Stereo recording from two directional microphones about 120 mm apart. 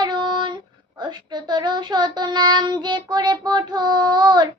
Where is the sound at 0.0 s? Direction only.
40° right (ahead or behind).